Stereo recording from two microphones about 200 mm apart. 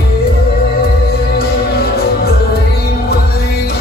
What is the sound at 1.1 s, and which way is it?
Music, 50° left (ahead or behind).